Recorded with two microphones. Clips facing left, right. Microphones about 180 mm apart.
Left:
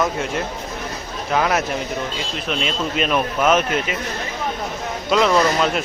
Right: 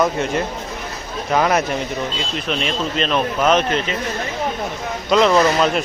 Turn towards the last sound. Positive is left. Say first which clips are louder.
# right 2 dB
turn(degrees=0)  # may be behind; listen again after turning